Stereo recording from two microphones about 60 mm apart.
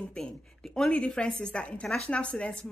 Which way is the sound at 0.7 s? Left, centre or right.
Centre.